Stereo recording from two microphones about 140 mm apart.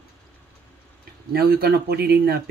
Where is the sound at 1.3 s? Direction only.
90° right.